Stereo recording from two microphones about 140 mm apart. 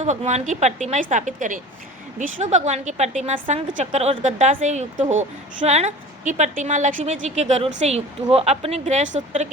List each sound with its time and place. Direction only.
0.0 s a woman's voice: 55° right (ahead or behind)